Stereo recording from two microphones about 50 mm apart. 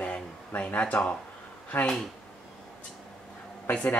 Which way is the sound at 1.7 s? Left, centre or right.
Left.